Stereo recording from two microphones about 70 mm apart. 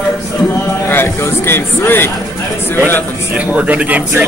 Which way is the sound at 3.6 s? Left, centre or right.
Centre.